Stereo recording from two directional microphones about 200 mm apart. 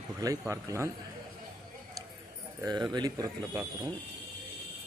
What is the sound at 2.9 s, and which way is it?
Speech, 20° right (ahead or behind).